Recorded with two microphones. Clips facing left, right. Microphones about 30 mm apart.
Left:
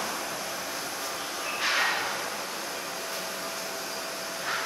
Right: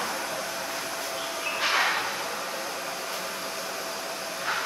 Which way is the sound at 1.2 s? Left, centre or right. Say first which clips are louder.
Right 3 dB; right.